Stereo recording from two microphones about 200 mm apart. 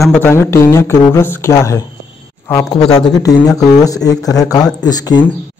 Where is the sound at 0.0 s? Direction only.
10° left (ahead or behind).